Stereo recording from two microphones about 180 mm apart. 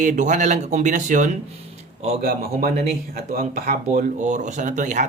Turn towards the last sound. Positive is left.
turn(degrees=-40)  # may be behind; listen again after turning